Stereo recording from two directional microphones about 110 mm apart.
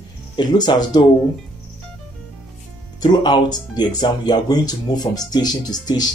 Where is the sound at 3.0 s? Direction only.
40° left (ahead or behind).